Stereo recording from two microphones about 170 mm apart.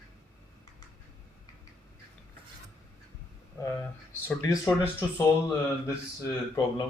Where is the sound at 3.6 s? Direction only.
15° left (ahead or behind).